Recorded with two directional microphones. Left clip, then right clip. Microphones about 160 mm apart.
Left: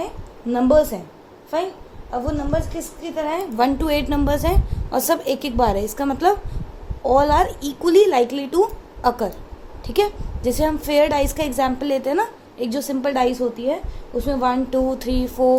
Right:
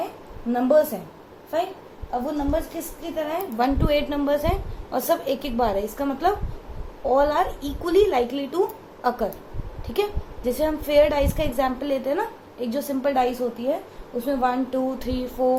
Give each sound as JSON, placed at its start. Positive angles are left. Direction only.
{"t": 0.5, "sound": "a woman's voice", "side_deg": 65}
{"t": 3.2, "sound": "a woman's voice", "side_deg": 75}